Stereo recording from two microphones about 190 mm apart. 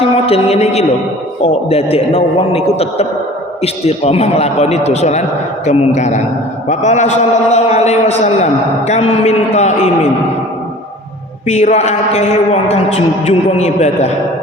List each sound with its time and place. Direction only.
0.0 s a man's voice: 30° left (ahead or behind)
11.4 s a man's voice: 35° left (ahead or behind)